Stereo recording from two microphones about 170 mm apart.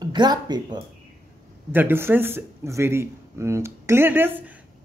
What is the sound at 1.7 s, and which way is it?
A man's voice, 10° right (ahead or behind).